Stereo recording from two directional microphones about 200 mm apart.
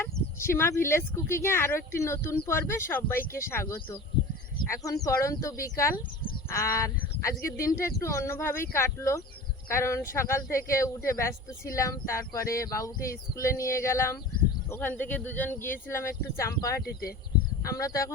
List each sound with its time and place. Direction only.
0.0 s speech: 10° left (ahead or behind)
16.8 s speech: 50° left (ahead or behind)
17.6 s speech: 15° left (ahead or behind)